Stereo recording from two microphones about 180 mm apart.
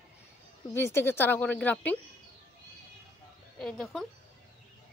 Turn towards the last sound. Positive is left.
turn(degrees=5)  # may be behind; listen again after turning